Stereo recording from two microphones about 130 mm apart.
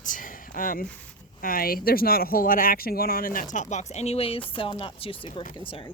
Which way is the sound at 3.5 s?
65° left (ahead or behind).